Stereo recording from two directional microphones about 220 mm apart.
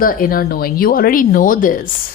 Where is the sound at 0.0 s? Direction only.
40° left (ahead or behind).